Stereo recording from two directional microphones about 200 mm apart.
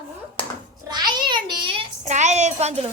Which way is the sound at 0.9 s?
20° right (ahead or behind).